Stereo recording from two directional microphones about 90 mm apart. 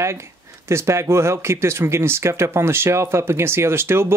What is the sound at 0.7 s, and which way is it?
Speech, 30° right (ahead or behind).